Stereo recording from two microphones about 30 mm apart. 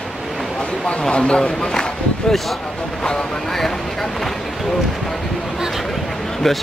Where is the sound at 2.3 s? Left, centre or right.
Centre.